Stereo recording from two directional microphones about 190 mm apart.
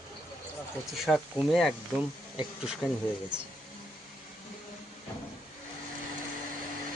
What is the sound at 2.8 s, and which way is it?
Speech, 20° left (ahead or behind).